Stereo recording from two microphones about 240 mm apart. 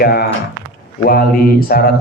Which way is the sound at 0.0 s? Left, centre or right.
Left.